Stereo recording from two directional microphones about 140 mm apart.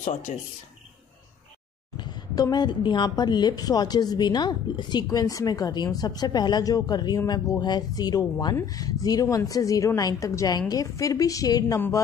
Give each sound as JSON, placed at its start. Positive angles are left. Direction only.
{"t": 0.0, "sound": "speech", "side_deg": 60}
{"t": 2.0, "sound": "a woman's voice", "side_deg": 30}